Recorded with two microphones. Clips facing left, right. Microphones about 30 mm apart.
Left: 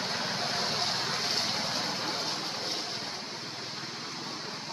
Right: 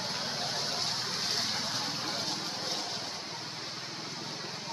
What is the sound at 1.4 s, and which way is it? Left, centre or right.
Vehicle, left.